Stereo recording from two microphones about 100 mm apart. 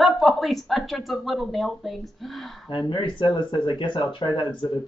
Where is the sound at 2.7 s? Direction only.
55° left (ahead or behind).